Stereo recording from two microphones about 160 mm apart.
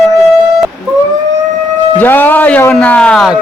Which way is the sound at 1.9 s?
10° left (ahead or behind).